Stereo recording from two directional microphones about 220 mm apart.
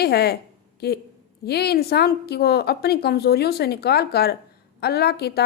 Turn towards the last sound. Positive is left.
turn(degrees=45)  # may be behind; listen again after turning